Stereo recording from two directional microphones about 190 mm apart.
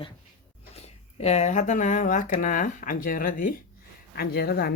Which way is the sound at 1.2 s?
35° left (ahead or behind).